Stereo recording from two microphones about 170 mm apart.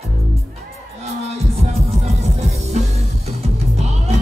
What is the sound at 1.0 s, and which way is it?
Music, 40° right (ahead or behind).